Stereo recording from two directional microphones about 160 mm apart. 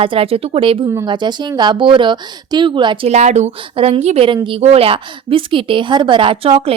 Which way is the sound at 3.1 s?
45° right (ahead or behind).